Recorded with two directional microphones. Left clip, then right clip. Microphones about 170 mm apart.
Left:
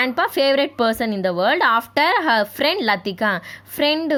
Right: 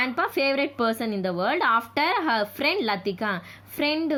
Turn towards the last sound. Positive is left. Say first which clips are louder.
# left 6 dB
turn(degrees=45)  # may be behind; listen again after turning